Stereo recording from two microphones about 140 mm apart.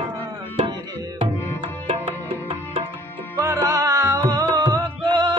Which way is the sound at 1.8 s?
40° right (ahead or behind).